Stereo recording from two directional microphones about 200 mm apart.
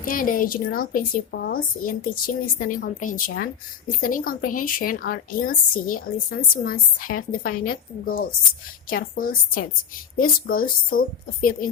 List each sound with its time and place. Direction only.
0.0 s speech: 45° left (ahead or behind)